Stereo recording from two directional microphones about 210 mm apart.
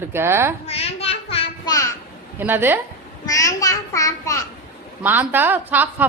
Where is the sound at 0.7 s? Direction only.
30° left (ahead or behind).